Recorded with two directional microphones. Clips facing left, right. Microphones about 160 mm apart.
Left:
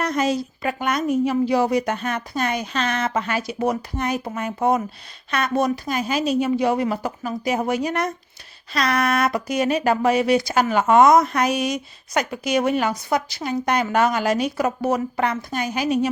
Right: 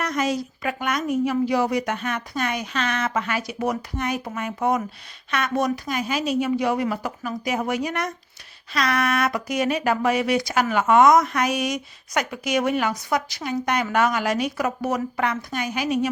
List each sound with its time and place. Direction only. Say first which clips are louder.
0.0 s speech: left 3 dB; 30° left (ahead or behind)